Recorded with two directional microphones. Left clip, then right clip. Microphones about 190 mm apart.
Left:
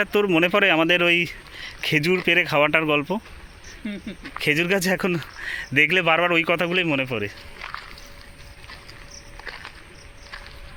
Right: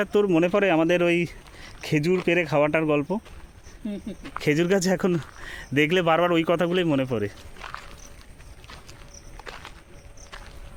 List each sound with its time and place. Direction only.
0.0 s speech: 5° right (ahead or behind)
4.4 s speech: 15° right (ahead or behind)